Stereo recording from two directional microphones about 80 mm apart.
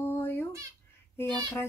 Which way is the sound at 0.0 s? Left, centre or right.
Left.